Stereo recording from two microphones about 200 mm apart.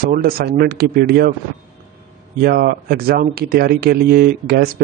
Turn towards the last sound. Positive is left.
turn(degrees=-50)  # may be behind; listen again after turning